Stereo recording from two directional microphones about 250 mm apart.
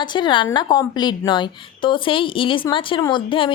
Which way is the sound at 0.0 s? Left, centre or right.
Centre.